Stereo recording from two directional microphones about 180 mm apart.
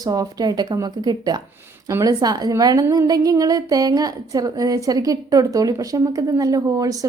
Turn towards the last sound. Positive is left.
turn(degrees=-20)  # may be behind; listen again after turning